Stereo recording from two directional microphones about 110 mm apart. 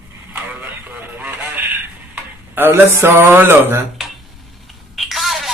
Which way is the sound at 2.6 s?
20° right (ahead or behind).